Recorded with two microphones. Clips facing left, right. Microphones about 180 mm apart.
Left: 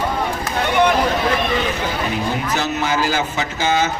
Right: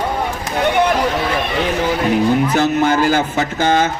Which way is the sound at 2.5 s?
55° right (ahead or behind).